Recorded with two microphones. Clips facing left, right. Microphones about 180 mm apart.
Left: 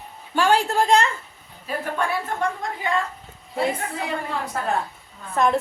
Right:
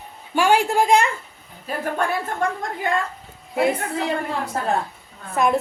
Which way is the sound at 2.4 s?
45° right (ahead or behind).